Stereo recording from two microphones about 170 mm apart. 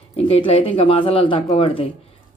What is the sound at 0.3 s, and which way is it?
A woman's voice, 35° left (ahead or behind).